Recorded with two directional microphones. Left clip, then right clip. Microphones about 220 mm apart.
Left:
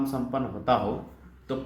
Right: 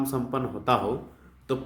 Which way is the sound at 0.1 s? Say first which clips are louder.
Right 1 dB; 30° right (ahead or behind).